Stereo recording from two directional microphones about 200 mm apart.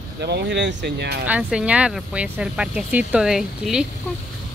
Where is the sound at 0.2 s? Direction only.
55° right (ahead or behind).